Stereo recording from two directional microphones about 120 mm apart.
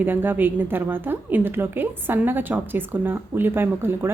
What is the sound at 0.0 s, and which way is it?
A woman's voice, 15° right (ahead or behind).